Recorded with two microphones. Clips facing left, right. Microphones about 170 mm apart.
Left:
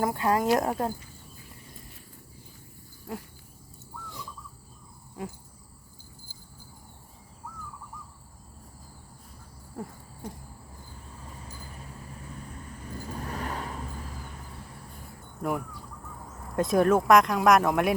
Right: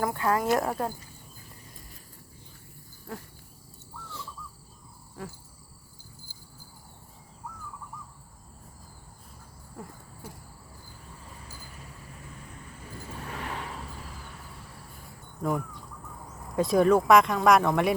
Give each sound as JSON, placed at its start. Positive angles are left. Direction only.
{"t": 0.0, "sound": "speech", "side_deg": 20}
{"t": 13.1, "sound": "vehicle", "side_deg": 40}
{"t": 15.4, "sound": "speech", "side_deg": 5}